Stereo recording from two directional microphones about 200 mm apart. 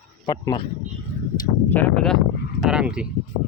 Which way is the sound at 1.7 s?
5° left (ahead or behind).